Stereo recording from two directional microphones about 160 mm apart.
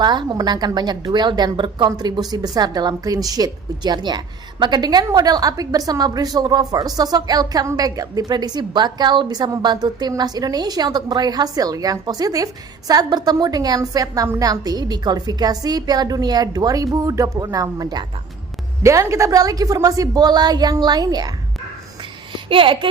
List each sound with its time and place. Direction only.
0.0 s a woman's voice: 25° right (ahead or behind)